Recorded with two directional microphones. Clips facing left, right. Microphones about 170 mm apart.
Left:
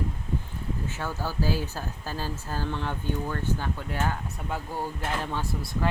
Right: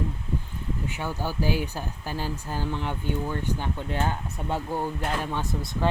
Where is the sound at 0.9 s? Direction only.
15° right (ahead or behind).